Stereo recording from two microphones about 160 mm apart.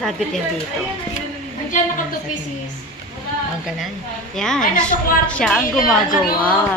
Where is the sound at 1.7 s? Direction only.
55° left (ahead or behind).